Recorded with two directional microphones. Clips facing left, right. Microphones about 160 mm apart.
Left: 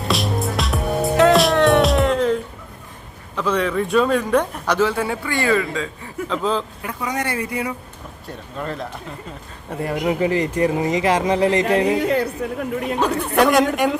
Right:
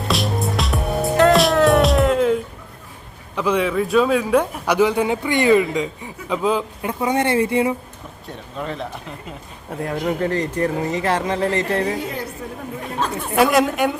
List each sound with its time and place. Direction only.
0.0 s music: centre (ahead or behind)
3.3 s a man's voice: 10° right (ahead or behind)
6.8 s a woman's voice: 25° right (ahead or behind)
8.5 s a woman's voice: centre (ahead or behind)
9.9 s speech: 10° left (ahead or behind)
11.9 s a woman's voice: 70° left (ahead or behind)
13.3 s a woman's voice: centre (ahead or behind)